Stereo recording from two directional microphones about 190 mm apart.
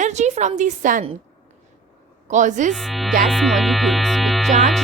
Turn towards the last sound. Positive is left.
turn(degrees=0)  # may be behind; listen again after turning